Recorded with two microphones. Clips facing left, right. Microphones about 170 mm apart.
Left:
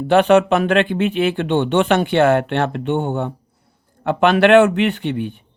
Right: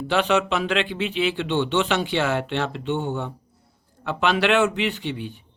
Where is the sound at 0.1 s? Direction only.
55° left (ahead or behind).